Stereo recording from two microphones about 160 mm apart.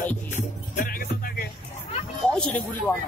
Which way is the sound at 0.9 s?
65° left (ahead or behind).